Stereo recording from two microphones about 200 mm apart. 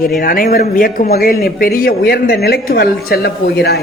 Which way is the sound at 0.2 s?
45° left (ahead or behind).